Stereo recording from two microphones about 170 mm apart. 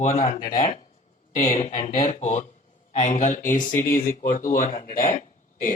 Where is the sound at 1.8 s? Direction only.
50° left (ahead or behind).